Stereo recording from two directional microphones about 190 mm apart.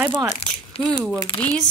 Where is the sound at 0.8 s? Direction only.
5° left (ahead or behind).